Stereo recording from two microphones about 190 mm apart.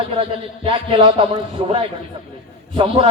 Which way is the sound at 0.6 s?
30° right (ahead or behind).